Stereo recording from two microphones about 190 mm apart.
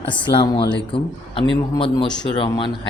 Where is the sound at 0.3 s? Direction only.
25° left (ahead or behind).